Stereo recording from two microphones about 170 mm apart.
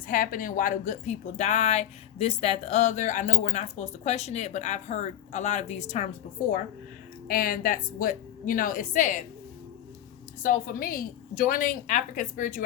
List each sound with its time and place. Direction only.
0.1 s a woman's voice: 55° left (ahead or behind)
7.3 s a woman's voice: 60° left (ahead or behind)
10.4 s a woman's voice: 55° left (ahead or behind)